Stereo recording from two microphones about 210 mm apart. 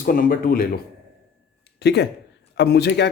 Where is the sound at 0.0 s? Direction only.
40° left (ahead or behind).